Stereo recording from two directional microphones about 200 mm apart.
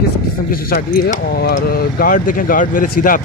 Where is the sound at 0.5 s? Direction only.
50° left (ahead or behind).